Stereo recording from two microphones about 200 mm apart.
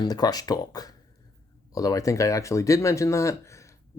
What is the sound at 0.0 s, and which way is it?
Speech, 20° left (ahead or behind).